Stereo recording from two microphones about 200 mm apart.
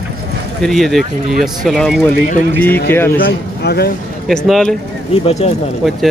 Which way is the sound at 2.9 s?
10° left (ahead or behind).